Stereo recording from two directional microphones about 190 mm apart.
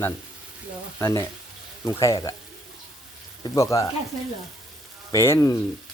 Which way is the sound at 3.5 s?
15° left (ahead or behind).